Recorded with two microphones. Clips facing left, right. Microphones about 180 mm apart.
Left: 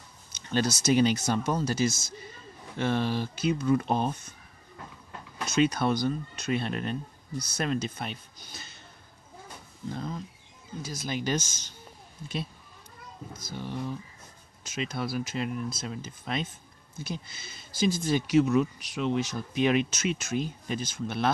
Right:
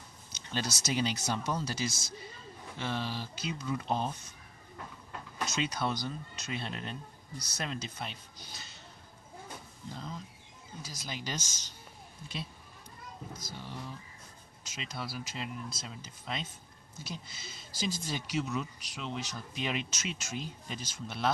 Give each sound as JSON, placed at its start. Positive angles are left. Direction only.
{"t": 0.5, "sound": "speech", "side_deg": 50}
{"t": 5.5, "sound": "speech", "side_deg": 55}
{"t": 9.8, "sound": "speech", "side_deg": 55}
{"t": 13.5, "sound": "speech", "side_deg": 55}